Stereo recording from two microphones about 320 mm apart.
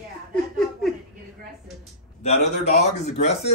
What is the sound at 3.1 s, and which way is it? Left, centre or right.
Speech, left.